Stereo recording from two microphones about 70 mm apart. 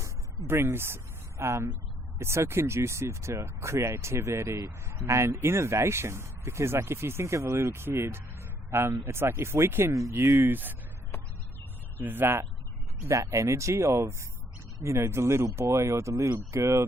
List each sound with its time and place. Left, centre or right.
0.4 s speech: right
9.9 s speech: right
11.9 s speech: right
13.1 s speech: right